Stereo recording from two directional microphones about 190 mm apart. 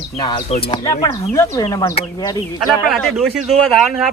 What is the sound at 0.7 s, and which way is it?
Speech, 15° left (ahead or behind).